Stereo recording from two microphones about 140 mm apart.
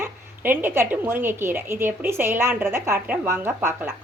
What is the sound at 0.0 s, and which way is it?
A woman's voice, 15° right (ahead or behind).